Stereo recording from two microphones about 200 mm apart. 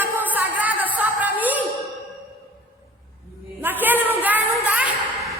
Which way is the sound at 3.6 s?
10° right (ahead or behind).